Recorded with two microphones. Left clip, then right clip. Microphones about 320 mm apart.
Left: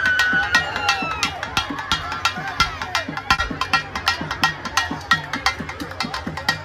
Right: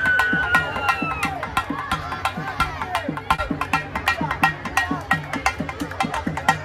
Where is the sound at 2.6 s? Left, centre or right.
Centre.